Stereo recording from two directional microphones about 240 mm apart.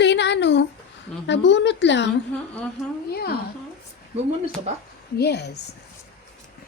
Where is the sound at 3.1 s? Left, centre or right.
Left.